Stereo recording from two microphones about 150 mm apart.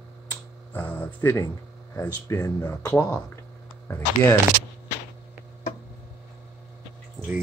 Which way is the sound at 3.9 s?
10° left (ahead or behind).